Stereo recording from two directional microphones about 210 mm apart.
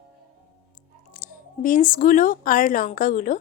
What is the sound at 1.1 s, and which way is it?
Speech, 40° left (ahead or behind).